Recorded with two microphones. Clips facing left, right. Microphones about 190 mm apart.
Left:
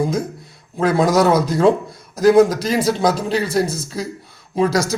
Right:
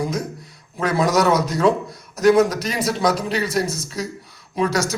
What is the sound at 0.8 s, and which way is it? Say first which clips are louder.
A man's voice: left 4 dB; 30° left (ahead or behind).